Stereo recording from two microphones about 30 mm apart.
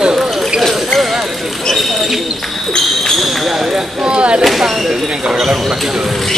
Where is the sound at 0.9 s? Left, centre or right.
Centre.